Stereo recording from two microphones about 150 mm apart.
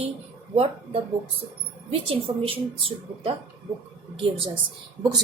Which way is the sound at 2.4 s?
35° right (ahead or behind).